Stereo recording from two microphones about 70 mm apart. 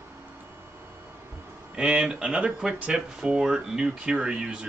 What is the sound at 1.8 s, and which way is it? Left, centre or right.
Speech, centre.